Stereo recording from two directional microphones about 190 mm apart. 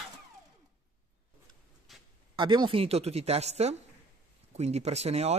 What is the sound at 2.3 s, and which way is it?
A woman's voice, 25° right (ahead or behind).